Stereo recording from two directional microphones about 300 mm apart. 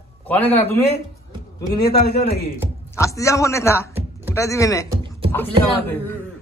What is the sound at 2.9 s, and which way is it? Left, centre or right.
A man's voice, centre.